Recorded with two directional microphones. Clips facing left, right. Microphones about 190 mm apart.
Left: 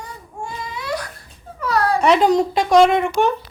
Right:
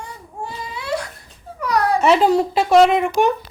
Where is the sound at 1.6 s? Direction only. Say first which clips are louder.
Even; 15° right (ahead or behind).